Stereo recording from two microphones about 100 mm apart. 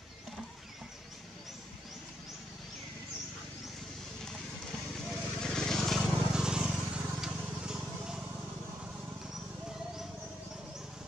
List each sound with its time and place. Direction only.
4.9 s vehicle: centre (ahead or behind)
9.3 s horse: 5° right (ahead or behind)